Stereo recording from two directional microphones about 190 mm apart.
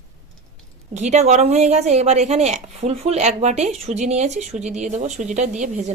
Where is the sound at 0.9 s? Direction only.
40° right (ahead or behind).